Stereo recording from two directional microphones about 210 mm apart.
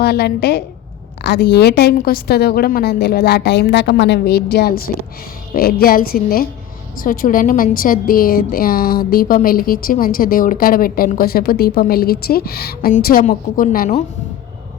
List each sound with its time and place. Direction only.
0.0 s a woman's voice: 50° left (ahead or behind)